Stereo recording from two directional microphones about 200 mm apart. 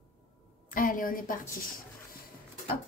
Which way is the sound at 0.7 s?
45° left (ahead or behind).